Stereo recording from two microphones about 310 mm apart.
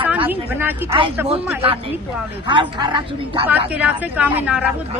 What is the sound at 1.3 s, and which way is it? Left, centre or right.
A woman's voice, centre.